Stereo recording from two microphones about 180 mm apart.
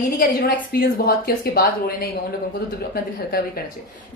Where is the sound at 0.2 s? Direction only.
55° left (ahead or behind).